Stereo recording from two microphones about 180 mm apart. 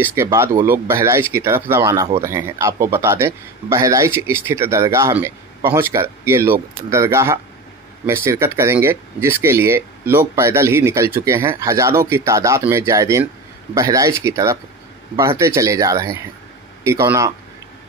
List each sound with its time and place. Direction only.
0.0 s speech: 15° right (ahead or behind)